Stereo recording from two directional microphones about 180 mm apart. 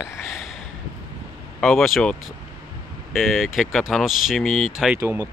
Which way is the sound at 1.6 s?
Centre (ahead or behind).